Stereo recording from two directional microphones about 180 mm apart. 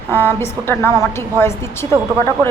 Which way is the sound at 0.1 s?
10° left (ahead or behind).